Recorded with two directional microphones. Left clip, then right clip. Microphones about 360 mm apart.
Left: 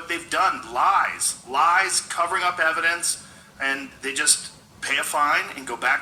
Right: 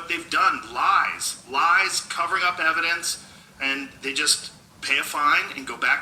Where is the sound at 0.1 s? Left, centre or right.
Left.